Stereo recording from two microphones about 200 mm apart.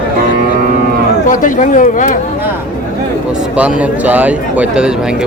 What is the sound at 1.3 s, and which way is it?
Speech, 40° left (ahead or behind).